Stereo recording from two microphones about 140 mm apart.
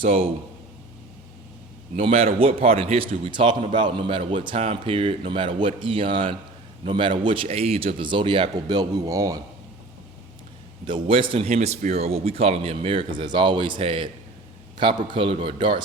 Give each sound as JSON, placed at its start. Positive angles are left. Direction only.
{"t": 2.0, "sound": "a man's voice", "side_deg": -45}
{"t": 10.8, "sound": "a man's voice", "side_deg": -35}